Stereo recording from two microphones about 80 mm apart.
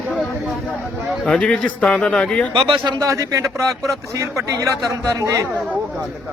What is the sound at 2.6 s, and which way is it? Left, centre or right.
Speech, right.